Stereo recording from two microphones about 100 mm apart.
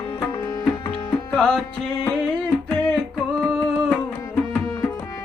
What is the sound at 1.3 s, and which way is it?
Music, 5° left (ahead or behind).